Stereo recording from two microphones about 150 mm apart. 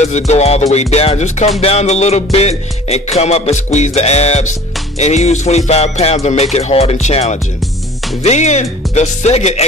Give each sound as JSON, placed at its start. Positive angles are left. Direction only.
{"t": 0.0, "sound": "music", "side_deg": 50}
{"t": 7.6, "sound": "music", "side_deg": 0}
{"t": 8.2, "sound": "music", "side_deg": 50}